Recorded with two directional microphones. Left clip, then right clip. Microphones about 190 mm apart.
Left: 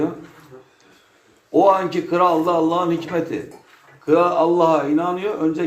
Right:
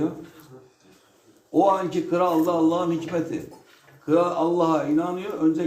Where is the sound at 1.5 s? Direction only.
10° left (ahead or behind).